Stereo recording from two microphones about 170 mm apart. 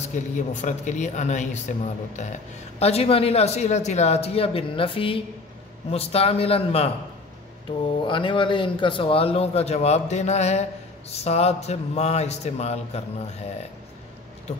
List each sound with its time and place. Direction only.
0.1 s a man's voice: 45° left (ahead or behind)
8.1 s a man's voice: 30° left (ahead or behind)